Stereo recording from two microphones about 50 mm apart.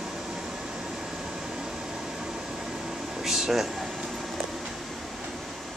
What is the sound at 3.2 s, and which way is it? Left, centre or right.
Air conditioning, centre.